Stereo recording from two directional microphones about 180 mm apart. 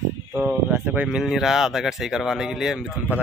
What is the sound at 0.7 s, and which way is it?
Speech, 10° right (ahead or behind).